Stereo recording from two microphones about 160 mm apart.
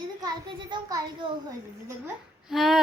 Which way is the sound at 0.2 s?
25° right (ahead or behind).